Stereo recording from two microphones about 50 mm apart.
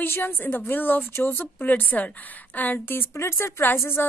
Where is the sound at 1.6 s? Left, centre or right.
Left.